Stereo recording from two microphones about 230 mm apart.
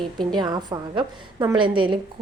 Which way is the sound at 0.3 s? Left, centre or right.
Centre.